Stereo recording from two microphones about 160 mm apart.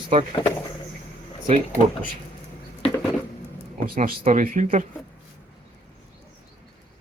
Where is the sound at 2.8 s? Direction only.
40° left (ahead or behind).